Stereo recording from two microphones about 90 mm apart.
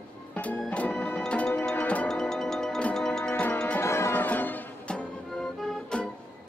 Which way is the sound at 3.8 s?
30° left (ahead or behind).